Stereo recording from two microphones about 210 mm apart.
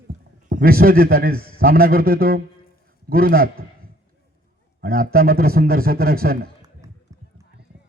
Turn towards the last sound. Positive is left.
turn(degrees=-15)  # may be behind; listen again after turning